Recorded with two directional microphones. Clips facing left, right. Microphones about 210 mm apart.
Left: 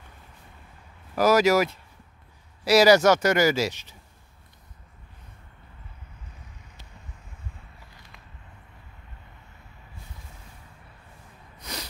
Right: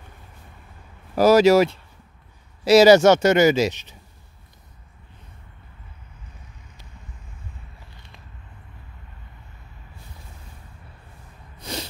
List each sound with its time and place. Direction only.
1.1 s speech: 30° right (ahead or behind)
11.6 s snort: 30° right (ahead or behind)